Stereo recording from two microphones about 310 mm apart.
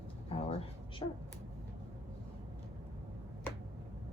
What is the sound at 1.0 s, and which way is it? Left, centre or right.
Speech, centre.